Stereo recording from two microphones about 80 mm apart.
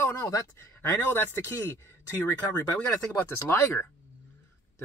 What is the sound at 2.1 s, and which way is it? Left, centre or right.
Speech, left.